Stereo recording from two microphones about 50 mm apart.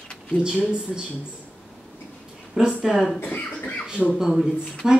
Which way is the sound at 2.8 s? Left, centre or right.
Centre.